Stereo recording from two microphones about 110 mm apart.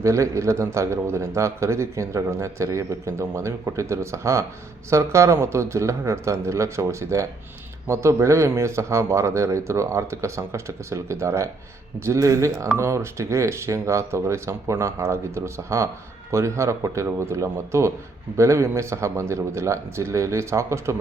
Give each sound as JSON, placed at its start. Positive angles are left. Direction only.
{"t": 0.0, "sound": "a man's voice", "side_deg": -30}